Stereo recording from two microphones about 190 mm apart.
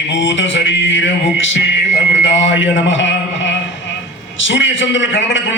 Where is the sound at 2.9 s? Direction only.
75° left (ahead or behind).